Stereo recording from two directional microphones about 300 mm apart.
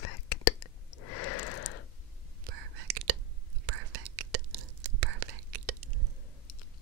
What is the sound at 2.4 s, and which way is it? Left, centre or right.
Whispering, right.